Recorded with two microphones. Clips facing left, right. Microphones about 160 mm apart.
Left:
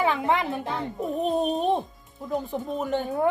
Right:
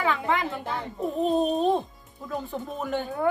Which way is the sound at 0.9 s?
15° left (ahead or behind).